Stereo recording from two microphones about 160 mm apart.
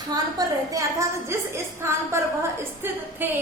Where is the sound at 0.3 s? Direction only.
20° right (ahead or behind).